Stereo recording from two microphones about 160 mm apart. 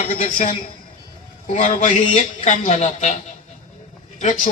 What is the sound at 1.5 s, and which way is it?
A man's voice, 50° left (ahead or behind).